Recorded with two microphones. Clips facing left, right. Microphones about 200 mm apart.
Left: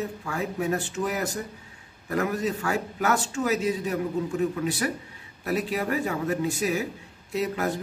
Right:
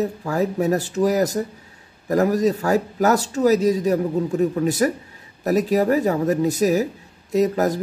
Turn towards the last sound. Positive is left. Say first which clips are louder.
# right 8 dB
turn(degrees=-40)  # may be behind; listen again after turning